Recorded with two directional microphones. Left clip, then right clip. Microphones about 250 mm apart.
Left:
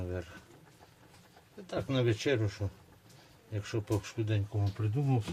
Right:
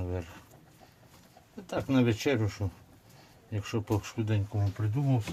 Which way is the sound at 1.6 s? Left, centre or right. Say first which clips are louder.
Right 3 dB; right.